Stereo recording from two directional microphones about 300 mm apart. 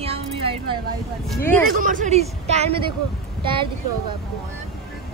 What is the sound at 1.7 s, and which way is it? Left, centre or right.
A woman's voice, right.